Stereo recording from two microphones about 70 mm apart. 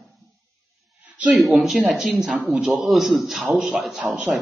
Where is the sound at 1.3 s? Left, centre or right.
Centre.